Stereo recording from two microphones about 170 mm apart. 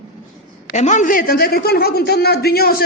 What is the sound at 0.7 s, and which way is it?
A woman's voice, 45° left (ahead or behind).